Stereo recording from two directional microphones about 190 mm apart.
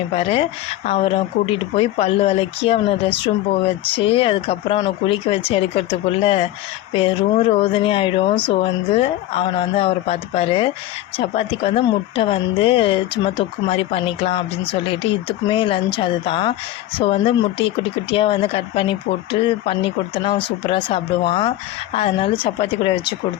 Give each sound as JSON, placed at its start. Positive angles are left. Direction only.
{"t": 0.1, "sound": "speech", "side_deg": 30}